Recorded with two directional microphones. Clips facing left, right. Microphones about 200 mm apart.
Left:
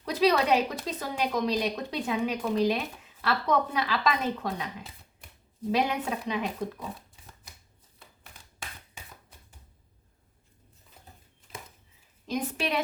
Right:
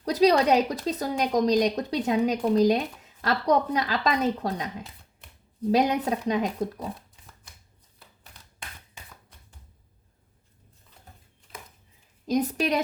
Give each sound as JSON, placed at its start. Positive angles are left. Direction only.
{"t": 0.0, "sound": "a woman's voice", "side_deg": -40}
{"t": 5.7, "sound": "a woman's voice", "side_deg": -40}
{"t": 12.3, "sound": "a woman's voice", "side_deg": -40}